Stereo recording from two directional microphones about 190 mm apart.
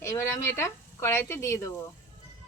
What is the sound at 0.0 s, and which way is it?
Speech, 15° left (ahead or behind).